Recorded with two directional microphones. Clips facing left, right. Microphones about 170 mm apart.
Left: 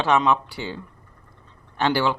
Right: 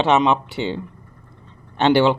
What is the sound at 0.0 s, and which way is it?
Speech, 20° right (ahead or behind).